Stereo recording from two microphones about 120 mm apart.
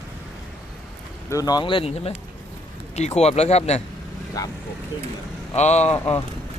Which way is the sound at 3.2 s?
65° left (ahead or behind).